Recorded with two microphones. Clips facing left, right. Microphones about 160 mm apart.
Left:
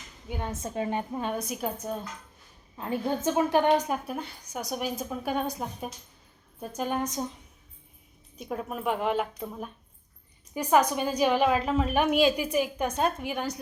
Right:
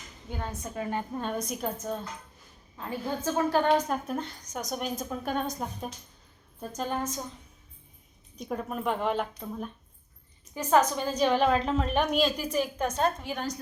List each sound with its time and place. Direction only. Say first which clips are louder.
0.3 s a woman's voice: left 2 dB; 15° left (ahead or behind)
1.2 s a woman's voice: left 1 dB; 5° left (ahead or behind)
8.4 s a woman's voice: right 1 dB; 5° left (ahead or behind)